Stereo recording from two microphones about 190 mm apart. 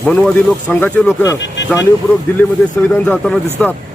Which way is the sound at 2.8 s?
5° left (ahead or behind).